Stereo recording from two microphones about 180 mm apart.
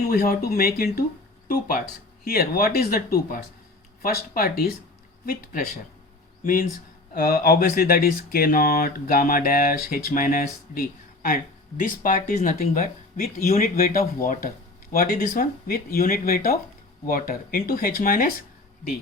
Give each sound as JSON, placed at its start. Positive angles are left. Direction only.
{"t": 0.1, "sound": "speech", "side_deg": 60}
{"t": 12.5, "sound": "speech", "side_deg": 55}